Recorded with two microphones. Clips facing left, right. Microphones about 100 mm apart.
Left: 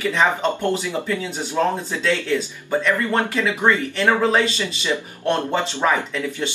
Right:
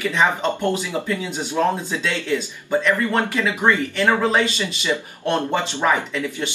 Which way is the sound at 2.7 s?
10° left (ahead or behind).